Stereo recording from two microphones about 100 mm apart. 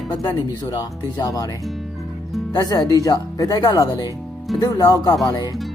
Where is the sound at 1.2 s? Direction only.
35° left (ahead or behind).